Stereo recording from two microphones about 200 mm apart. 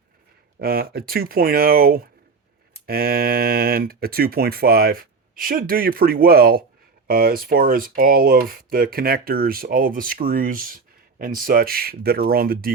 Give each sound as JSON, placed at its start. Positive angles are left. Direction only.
{"t": 0.6, "sound": "speech", "side_deg": -50}